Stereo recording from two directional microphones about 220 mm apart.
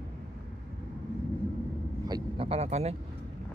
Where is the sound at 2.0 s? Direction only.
20° right (ahead or behind).